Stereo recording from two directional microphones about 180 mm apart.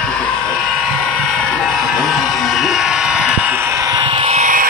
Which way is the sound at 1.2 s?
5° left (ahead or behind).